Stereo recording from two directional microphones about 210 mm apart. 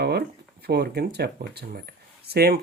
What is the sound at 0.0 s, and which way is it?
Speech, 50° right (ahead or behind).